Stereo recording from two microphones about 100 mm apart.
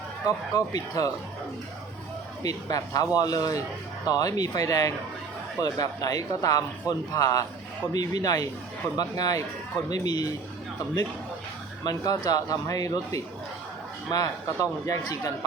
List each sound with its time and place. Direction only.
0.3 s a man's voice: 40° left (ahead or behind)
2.4 s a man's voice: 40° left (ahead or behind)
11.8 s a man's voice: 40° left (ahead or behind)